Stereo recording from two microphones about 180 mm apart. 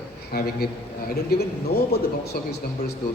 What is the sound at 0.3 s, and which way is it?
A man's voice, 60° left (ahead or behind).